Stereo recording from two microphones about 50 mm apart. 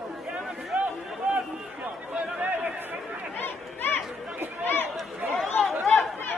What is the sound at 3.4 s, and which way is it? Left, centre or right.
Chatter, left.